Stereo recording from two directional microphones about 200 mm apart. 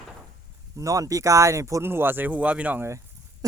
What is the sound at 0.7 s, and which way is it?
Speech, 15° right (ahead or behind).